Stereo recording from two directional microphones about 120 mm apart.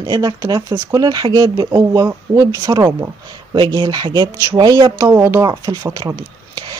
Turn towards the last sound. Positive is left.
turn(degrees=-25)  # may be behind; listen again after turning